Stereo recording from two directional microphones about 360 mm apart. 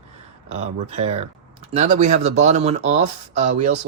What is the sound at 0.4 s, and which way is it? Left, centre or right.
Speech, centre.